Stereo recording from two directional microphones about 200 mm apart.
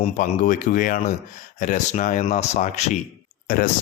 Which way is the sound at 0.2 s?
40° left (ahead or behind).